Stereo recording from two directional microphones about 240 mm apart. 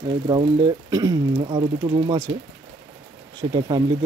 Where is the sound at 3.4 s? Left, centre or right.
Right.